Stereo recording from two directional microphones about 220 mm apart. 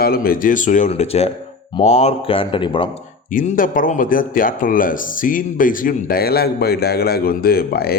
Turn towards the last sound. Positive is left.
turn(degrees=45)  # may be behind; listen again after turning